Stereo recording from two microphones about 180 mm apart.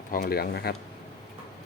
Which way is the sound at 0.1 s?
55° left (ahead or behind).